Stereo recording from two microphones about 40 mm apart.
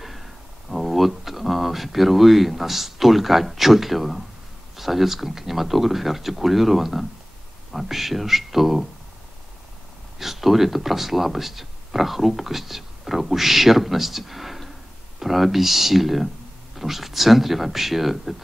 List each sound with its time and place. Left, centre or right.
0.0 s a sound: centre
4.7 s speech: centre
10.1 s speech: centre